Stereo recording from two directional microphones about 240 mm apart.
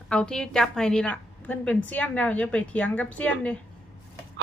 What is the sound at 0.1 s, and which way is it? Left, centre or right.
A woman's voice, centre.